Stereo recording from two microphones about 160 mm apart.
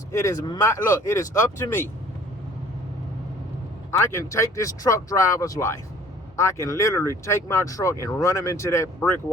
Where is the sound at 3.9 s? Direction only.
15° left (ahead or behind).